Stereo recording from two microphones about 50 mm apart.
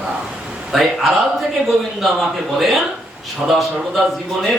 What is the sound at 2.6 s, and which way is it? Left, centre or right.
Speech, centre.